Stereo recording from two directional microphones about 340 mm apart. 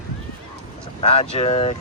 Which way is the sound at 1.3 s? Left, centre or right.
Centre.